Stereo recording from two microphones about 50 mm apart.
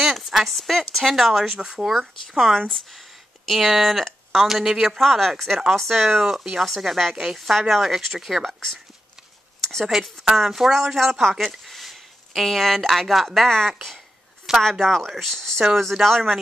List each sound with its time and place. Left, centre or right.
0.0 s speech: centre
1.9 s speech: centre
4.5 s speech: centre
8.5 s speech: centre
9.6 s a sound: centre
9.8 s speech: centre